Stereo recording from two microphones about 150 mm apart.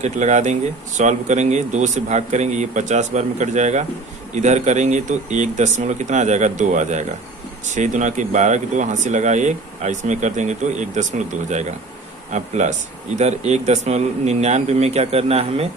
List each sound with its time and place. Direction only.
0.0 s speech: 50° right (ahead or behind)